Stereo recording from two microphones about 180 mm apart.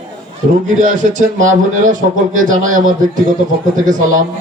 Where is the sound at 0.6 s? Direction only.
45° right (ahead or behind).